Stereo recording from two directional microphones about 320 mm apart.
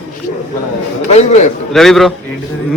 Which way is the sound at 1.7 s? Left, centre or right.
Centre.